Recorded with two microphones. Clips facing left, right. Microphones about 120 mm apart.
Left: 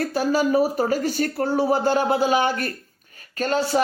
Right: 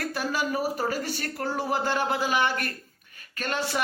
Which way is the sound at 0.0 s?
35° left (ahead or behind).